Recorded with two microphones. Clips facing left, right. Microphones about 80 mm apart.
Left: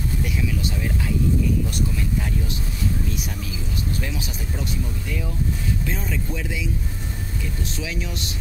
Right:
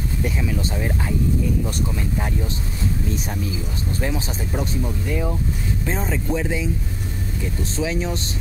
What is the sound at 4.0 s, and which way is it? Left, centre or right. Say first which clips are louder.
Speech: right 5 dB; right.